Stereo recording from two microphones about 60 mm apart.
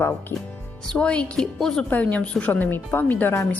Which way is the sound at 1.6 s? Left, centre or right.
Centre.